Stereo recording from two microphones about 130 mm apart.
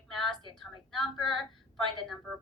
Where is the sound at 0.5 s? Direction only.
Centre (ahead or behind).